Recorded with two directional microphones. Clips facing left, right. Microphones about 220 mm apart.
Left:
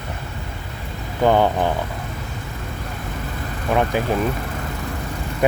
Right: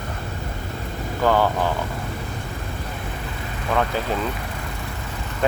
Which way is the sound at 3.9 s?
15° left (ahead or behind).